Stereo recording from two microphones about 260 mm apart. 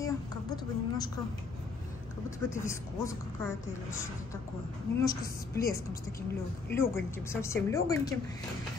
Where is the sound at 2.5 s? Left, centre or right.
Centre.